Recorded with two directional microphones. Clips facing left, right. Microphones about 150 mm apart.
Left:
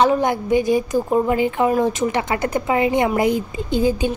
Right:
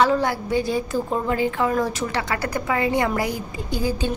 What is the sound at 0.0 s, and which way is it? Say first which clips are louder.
A woman's voice: left 3 dB; 20° left (ahead or behind).